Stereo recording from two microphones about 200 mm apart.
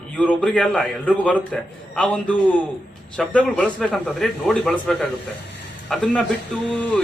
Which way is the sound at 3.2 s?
5° left (ahead or behind).